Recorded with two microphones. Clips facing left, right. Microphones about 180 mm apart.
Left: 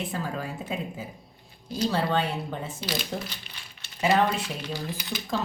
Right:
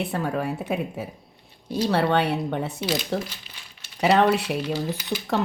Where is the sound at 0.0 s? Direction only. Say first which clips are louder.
Right 6 dB; 65° right (ahead or behind).